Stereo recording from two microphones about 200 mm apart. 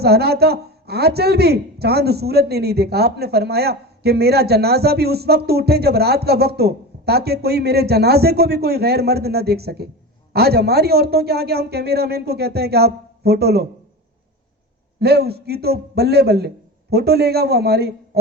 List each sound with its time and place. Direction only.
0.0 s speech: 55° right (ahead or behind)
14.9 s speech: 55° right (ahead or behind)